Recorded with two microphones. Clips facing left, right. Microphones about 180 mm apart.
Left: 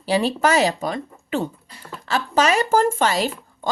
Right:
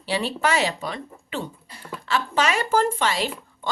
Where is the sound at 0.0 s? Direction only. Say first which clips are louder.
Left 5 dB; 40° left (ahead or behind).